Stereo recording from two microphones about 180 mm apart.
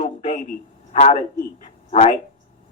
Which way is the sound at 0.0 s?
40° left (ahead or behind).